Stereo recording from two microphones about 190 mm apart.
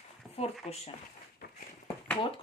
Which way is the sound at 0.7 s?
35° left (ahead or behind).